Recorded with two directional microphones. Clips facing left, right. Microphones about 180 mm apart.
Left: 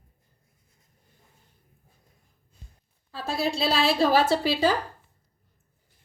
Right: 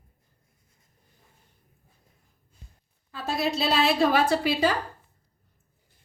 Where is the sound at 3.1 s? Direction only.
30° left (ahead or behind).